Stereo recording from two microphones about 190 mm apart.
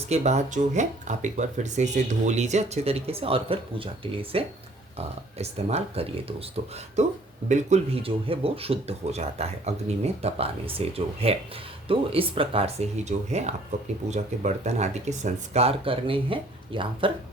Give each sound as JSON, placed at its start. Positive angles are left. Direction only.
{"t": 0.1, "sound": "speech", "side_deg": -35}